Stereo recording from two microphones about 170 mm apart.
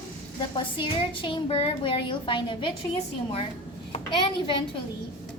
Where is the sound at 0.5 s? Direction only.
30° left (ahead or behind).